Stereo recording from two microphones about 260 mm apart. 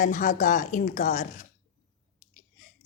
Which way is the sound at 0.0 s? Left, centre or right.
Left.